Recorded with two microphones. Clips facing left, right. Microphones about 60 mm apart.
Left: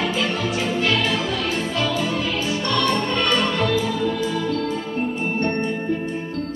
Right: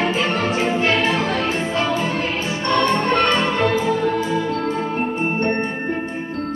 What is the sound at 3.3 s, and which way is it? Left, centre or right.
Music, right.